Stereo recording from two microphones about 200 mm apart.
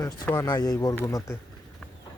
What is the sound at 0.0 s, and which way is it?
Speech, 15° left (ahead or behind).